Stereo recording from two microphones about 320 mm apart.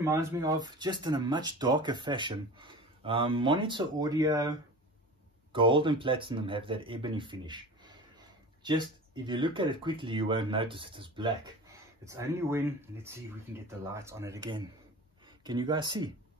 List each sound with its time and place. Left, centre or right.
0.0 s speech: centre